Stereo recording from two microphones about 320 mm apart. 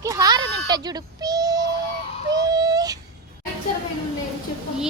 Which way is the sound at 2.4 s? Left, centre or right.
Centre.